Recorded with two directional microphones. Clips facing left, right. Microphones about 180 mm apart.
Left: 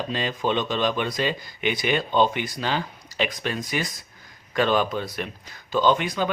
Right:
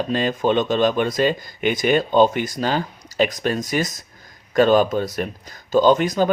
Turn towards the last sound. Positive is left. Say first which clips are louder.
# right 6 dB
turn(degrees=-40)  # may be behind; listen again after turning